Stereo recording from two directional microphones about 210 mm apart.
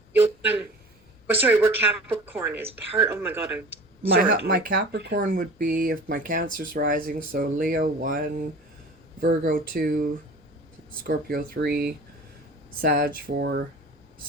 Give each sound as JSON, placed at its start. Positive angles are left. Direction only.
{"t": 0.2, "sound": "a sound", "side_deg": -10}
{"t": 1.3, "sound": "speech", "side_deg": -10}
{"t": 4.2, "sound": "speech", "side_deg": -50}
{"t": 9.2, "sound": "speech", "side_deg": -45}
{"t": 11.0, "sound": "speech", "side_deg": -45}